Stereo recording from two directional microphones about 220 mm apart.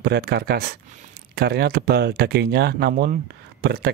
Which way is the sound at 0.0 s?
45° right (ahead or behind).